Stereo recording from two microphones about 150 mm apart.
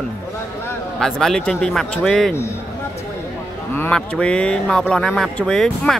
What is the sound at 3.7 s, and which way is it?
A man's voice, 10° left (ahead or behind).